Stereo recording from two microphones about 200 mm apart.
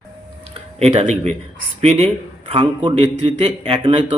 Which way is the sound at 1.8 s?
30° right (ahead or behind).